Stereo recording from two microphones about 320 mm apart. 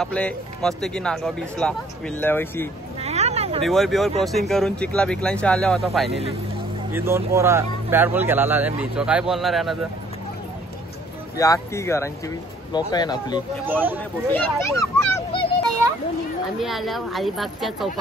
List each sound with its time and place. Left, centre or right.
0.0 s speech: centre
3.0 s hubbub: centre
3.6 s speech: centre
11.3 s speech: centre
13.7 s speech: centre
14.3 s speech: centre
16.5 s speech: centre